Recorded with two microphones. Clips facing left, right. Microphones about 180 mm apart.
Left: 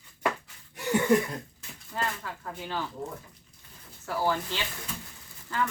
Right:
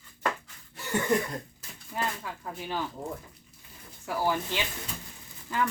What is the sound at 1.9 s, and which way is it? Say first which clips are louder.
Speech: even; 10° right (ahead or behind).